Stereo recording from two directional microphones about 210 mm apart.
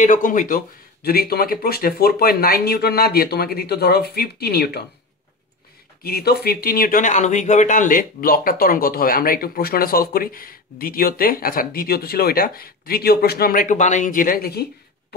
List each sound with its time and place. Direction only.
0.0 s speech: 40° left (ahead or behind)
6.0 s speech: 50° left (ahead or behind)